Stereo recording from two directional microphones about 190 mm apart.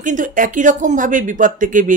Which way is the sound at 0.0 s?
45° right (ahead or behind).